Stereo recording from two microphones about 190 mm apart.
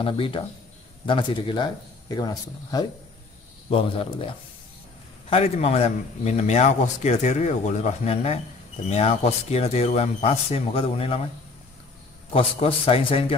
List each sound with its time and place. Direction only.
0.0 s a man's voice: 30° left (ahead or behind)
12.3 s speech: 30° left (ahead or behind)